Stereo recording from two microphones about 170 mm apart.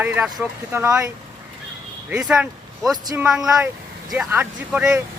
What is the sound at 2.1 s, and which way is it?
Speech, 5° right (ahead or behind).